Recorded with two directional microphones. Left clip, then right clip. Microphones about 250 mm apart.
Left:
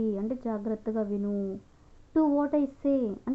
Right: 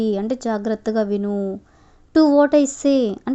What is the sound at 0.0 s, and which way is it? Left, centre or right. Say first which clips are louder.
A woman's voice: right 10 dB; right.